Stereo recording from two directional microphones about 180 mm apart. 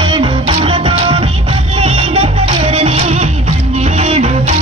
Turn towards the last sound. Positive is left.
turn(degrees=-35)  # may be behind; listen again after turning